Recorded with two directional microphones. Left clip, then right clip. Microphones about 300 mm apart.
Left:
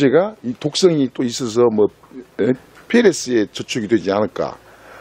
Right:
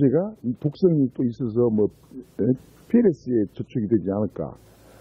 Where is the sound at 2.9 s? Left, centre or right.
Centre.